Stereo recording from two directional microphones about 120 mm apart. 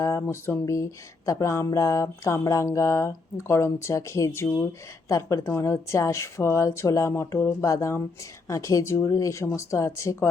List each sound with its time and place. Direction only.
0.3 s speech: 20° left (ahead or behind)